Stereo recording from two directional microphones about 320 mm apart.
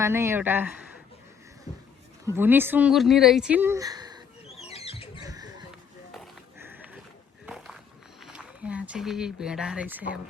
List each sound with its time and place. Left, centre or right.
0.0 s speech: centre
2.2 s speech: centre
4.4 s a sound: centre
5.2 s basketball bounce: centre
6.1 s run: centre
8.2 s speech: centre